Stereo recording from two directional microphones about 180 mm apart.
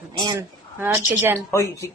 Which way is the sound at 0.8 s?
10° right (ahead or behind).